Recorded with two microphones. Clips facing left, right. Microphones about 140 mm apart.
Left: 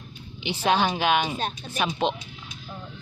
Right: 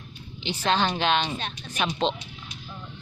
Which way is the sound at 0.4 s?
10° left (ahead or behind).